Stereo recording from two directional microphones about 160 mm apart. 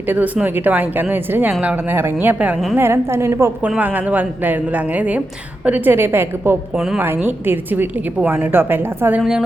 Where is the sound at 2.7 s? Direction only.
15° right (ahead or behind).